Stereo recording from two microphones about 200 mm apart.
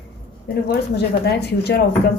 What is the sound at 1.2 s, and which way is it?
Speech, 55° left (ahead or behind).